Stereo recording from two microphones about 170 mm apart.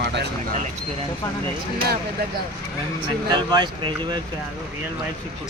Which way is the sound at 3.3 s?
25° right (ahead or behind).